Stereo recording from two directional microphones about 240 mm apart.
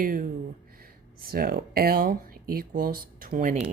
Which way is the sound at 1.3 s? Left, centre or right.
Right.